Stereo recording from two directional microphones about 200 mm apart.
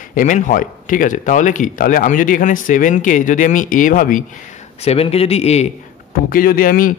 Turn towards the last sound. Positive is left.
turn(degrees=45)  # may be behind; listen again after turning